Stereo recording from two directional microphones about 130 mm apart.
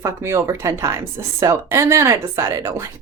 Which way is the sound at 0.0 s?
20° right (ahead or behind).